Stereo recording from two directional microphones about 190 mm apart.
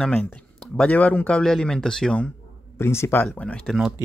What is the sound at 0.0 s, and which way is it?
Speech, 5° left (ahead or behind).